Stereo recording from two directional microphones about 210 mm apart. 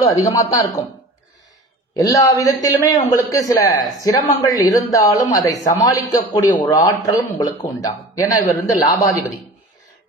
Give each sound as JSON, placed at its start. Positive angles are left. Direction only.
{"t": 0.1, "sound": "a woman's voice", "side_deg": 15}
{"t": 2.0, "sound": "a woman's voice", "side_deg": 15}